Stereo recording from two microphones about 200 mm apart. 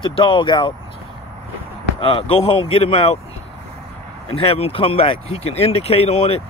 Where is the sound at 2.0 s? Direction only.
25° left (ahead or behind).